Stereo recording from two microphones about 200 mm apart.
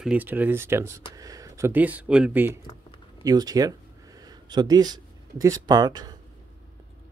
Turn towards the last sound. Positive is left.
turn(degrees=-20)  # may be behind; listen again after turning